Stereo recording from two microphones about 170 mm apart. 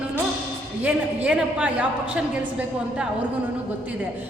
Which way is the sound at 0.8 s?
10° right (ahead or behind).